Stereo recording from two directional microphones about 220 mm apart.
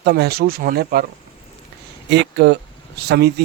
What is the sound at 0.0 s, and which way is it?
Speech, 50° right (ahead or behind).